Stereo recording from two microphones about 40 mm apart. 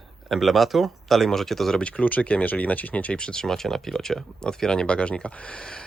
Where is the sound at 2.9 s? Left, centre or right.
Left.